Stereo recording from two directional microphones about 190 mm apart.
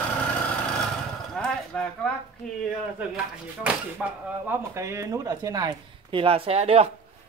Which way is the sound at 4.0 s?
5° right (ahead or behind).